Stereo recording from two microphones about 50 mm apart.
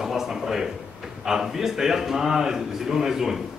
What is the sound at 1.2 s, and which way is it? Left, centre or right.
A man's voice, centre.